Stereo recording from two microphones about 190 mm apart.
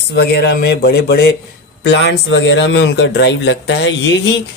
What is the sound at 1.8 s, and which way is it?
A man's voice, 70° left (ahead or behind).